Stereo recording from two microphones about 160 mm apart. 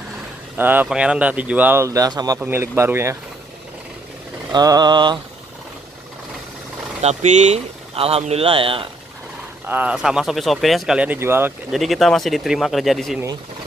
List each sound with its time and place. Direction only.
0.6 s speech: 10° right (ahead or behind)
4.5 s vehicle: 25° right (ahead or behind)
7.0 s speech: 45° right (ahead or behind)
9.7 s speech: 10° right (ahead or behind)
11.7 s speech: centre (ahead or behind)